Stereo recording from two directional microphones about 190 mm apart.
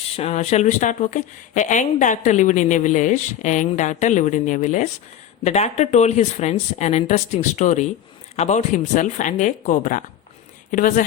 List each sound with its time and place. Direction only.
0.2 s a woman's voice: 35° left (ahead or behind)